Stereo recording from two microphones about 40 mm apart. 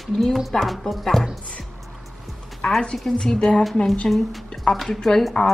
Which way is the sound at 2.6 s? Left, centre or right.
Centre.